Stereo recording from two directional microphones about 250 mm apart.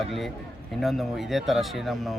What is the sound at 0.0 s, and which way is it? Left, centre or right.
Speech, centre.